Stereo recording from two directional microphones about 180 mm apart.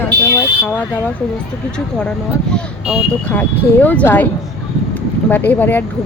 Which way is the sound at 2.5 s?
5° left (ahead or behind).